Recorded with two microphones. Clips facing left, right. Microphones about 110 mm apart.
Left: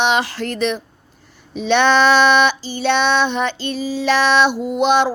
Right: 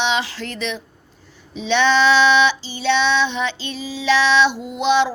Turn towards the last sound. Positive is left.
turn(degrees=50)  # may be behind; listen again after turning